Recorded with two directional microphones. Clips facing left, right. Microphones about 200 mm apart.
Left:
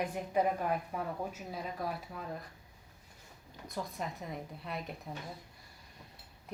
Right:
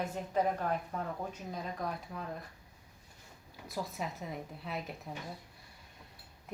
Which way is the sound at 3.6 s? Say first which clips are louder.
Right 1 dB; 5° right (ahead or behind).